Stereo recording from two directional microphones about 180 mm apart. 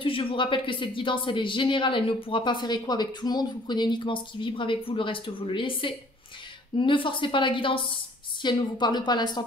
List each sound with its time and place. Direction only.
0.0 s speech: 30° left (ahead or behind)